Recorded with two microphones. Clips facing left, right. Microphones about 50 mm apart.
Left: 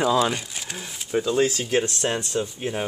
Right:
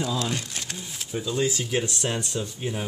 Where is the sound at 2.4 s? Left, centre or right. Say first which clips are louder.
Left 4 dB; left.